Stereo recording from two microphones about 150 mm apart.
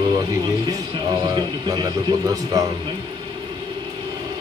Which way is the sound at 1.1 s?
25° right (ahead or behind).